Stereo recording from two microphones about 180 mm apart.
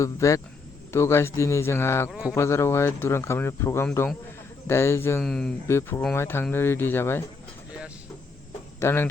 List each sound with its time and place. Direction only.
0.0 s speech: 15° left (ahead or behind)
2.0 s speech: 5° right (ahead or behind)
2.3 s speech: 15° left (ahead or behind)
5.2 s speech: 5° left (ahead or behind)
5.6 s speech: 15° left (ahead or behind)
8.8 s speech: 15° left (ahead or behind)